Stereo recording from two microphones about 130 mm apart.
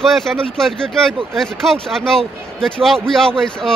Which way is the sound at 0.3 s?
5° left (ahead or behind).